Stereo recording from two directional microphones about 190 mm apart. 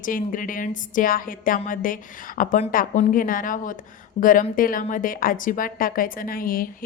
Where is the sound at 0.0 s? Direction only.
45° left (ahead or behind).